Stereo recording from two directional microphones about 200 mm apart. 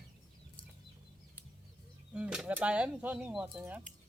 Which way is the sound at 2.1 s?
5° right (ahead or behind).